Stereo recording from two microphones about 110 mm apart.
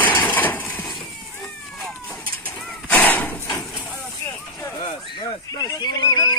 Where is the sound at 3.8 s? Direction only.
20° left (ahead or behind).